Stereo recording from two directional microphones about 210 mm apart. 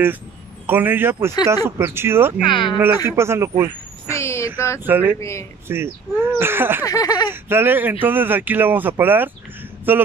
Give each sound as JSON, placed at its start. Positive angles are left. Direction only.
{"t": 0.7, "sound": "speech", "side_deg": -10}
{"t": 2.4, "sound": "speech", "side_deg": 25}
{"t": 3.1, "sound": "speech", "side_deg": -10}
{"t": 4.2, "sound": "a sound", "side_deg": 15}
{"t": 4.8, "sound": "speech", "side_deg": -10}
{"t": 6.8, "sound": "a sound", "side_deg": 15}
{"t": 7.2, "sound": "speech", "side_deg": -10}